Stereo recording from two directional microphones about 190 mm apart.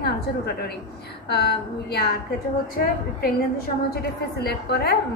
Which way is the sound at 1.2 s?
55° left (ahead or behind).